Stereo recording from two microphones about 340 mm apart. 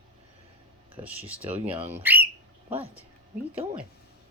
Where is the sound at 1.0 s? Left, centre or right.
Centre.